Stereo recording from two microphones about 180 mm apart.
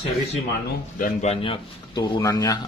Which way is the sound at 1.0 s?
40° left (ahead or behind).